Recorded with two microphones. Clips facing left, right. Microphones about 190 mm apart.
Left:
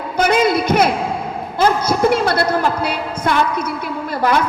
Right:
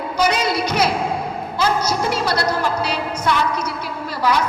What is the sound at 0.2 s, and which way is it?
Music, 55° left (ahead or behind).